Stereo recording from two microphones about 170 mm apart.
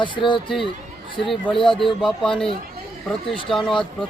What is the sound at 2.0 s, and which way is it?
Speech, 5° left (ahead or behind).